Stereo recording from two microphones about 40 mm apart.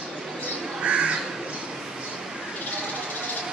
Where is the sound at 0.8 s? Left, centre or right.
Right.